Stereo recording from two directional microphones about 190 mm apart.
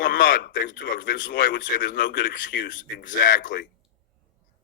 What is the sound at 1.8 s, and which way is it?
Speech, 70° left (ahead or behind).